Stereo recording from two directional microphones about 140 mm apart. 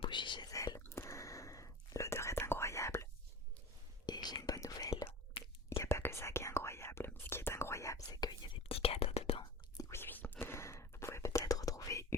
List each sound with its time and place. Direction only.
0.0 s whispering: 35° left (ahead or behind)
0.5 s whispering: 25° left (ahead or behind)
4.0 s whispering: 30° left (ahead or behind)
5.4 s whispering: 40° left (ahead or behind)
5.8 s whispering: 15° left (ahead or behind); by 9.4 s 45° left (ahead or behind)
9.9 s whispering: 15° left (ahead or behind)